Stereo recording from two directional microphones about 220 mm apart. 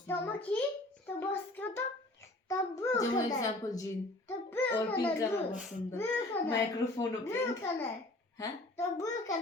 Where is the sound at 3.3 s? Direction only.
15° left (ahead or behind).